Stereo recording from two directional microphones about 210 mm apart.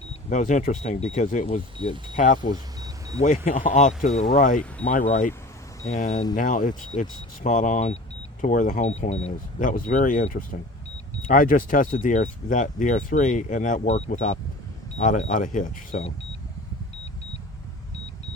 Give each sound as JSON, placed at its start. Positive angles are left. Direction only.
{"t": 0.3, "sound": "speech", "side_deg": 35}